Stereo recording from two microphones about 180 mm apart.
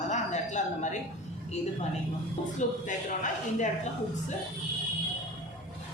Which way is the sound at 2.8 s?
45° left (ahead or behind).